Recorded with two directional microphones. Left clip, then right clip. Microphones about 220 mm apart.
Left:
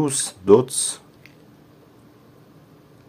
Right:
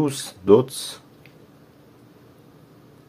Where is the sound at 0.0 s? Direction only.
Centre (ahead or behind).